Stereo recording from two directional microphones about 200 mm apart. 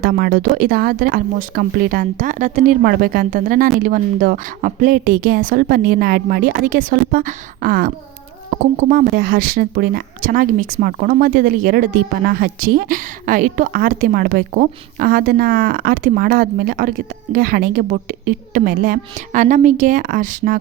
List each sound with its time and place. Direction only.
0.0 s a woman's voice: 45° right (ahead or behind)